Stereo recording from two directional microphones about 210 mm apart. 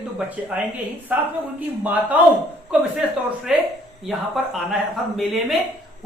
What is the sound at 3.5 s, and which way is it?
Speech, 5° right (ahead or behind).